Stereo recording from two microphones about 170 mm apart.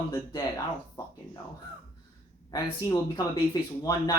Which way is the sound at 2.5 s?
20° left (ahead or behind).